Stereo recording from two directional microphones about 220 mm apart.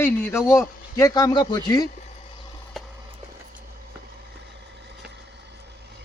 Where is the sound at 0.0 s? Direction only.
10° left (ahead or behind).